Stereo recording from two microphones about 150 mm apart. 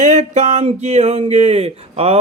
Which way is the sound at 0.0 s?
50° right (ahead or behind).